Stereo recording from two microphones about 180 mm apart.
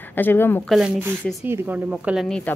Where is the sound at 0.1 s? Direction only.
10° left (ahead or behind).